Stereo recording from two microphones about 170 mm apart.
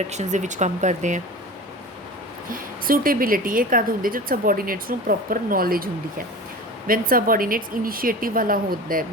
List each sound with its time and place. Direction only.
0.1 s speech: 45° right (ahead or behind)
2.5 s a woman's voice: 55° right (ahead or behind)